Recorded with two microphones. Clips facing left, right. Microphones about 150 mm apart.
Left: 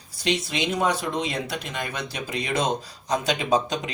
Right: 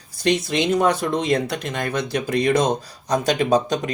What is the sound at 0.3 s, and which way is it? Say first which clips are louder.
Speech: right 6 dB; 50° right (ahead or behind).